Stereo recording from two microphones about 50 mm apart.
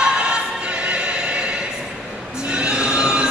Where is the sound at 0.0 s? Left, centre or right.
Centre.